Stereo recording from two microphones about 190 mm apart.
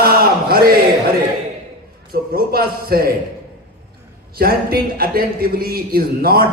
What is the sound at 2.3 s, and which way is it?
Speech, 55° right (ahead or behind).